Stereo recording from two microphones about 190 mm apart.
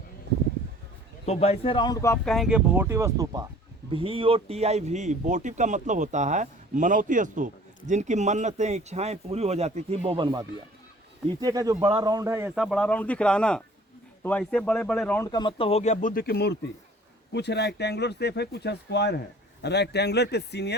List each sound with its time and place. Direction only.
1.2 s speech: 35° left (ahead or behind); by 2.1 s 20° left (ahead or behind)
2.2 s speech: centre (ahead or behind); by 3.4 s 15° right (ahead or behind)
3.9 s speech: 30° right (ahead or behind); by 15.2 s 5° left (ahead or behind)
15.2 s speech: 20° left (ahead or behind); by 20.7 s 60° left (ahead or behind)